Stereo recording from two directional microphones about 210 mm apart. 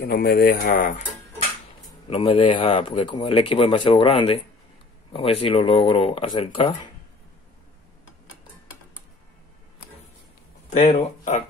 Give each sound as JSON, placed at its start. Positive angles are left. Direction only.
{"t": 0.0, "sound": "speech", "side_deg": 45}
{"t": 2.0, "sound": "speech", "side_deg": 25}
{"t": 10.9, "sound": "speech", "side_deg": 30}